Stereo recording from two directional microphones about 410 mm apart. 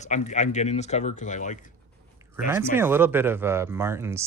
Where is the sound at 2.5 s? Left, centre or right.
Centre.